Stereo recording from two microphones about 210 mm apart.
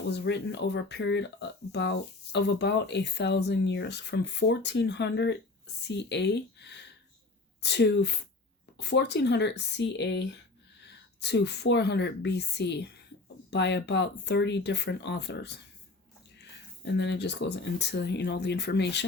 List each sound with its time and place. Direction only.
0.1 s speech: 55° left (ahead or behind)